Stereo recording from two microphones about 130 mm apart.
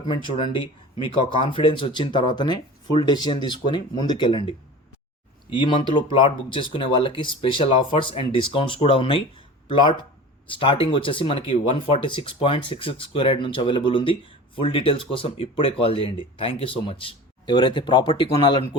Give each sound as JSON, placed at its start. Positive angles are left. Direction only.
{"t": 0.0, "sound": "speech", "side_deg": 40}